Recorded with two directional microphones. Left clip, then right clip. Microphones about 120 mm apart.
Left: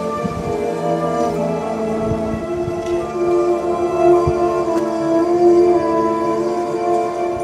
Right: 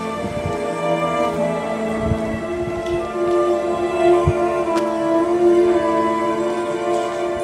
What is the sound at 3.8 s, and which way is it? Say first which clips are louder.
Music: left 3 dB; 35° right (ahead or behind).